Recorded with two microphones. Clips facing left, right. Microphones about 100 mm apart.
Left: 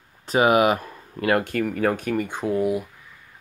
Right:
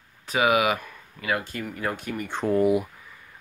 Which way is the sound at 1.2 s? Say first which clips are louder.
Left 7 dB; 60° left (ahead or behind).